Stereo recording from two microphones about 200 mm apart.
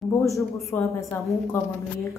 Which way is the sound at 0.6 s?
15° left (ahead or behind).